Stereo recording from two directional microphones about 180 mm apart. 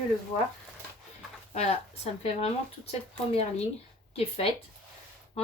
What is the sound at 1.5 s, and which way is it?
A woman's voice, 35° left (ahead or behind).